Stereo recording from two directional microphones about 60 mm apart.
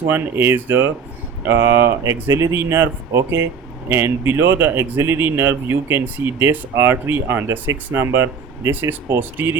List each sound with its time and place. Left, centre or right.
0.1 s speech: right